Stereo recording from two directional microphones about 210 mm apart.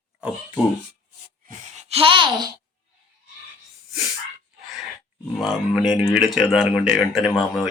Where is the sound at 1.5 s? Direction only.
30° right (ahead or behind).